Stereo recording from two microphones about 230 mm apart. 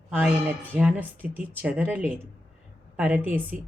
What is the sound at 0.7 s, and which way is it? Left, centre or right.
A woman's voice, centre.